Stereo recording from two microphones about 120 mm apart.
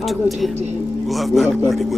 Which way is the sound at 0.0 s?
Centre (ahead or behind).